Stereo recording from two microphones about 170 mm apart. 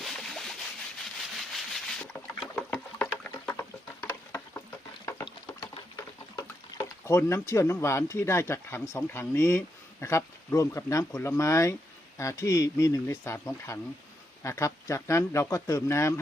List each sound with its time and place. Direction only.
0.0 s rub: centre (ahead or behind)
1.2 s boat: centre (ahead or behind)
2.6 s a sound: 5° left (ahead or behind)
4.3 s boat: 15° left (ahead or behind)
5.0 s a sound: 25° left (ahead or behind)
7.0 s speech: 15° left (ahead or behind)